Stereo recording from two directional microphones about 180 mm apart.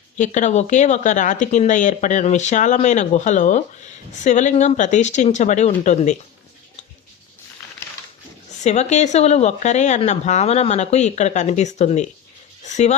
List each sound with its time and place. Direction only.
0.2 s speech: 45° left (ahead or behind)
8.6 s speech: 40° left (ahead or behind)